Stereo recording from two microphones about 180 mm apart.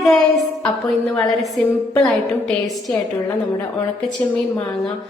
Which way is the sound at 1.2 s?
Centre (ahead or behind).